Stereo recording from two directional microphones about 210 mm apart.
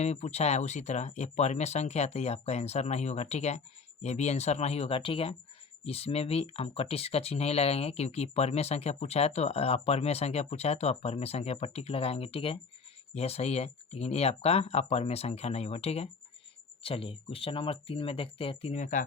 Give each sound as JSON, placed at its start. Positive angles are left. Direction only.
{"t": 0.0, "sound": "speech", "side_deg": 30}